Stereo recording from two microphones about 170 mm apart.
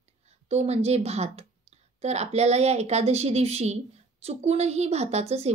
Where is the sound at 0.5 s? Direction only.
40° right (ahead or behind).